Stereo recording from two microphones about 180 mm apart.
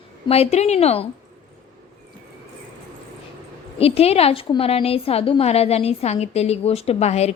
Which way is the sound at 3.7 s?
35° left (ahead or behind).